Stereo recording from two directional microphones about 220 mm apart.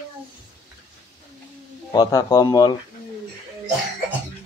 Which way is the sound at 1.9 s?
15° left (ahead or behind).